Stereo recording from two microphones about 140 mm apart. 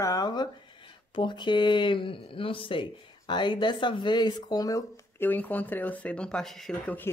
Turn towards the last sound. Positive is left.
turn(degrees=0)  # may be behind; listen again after turning